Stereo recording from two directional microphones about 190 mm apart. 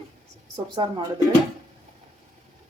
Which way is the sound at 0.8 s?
20° right (ahead or behind).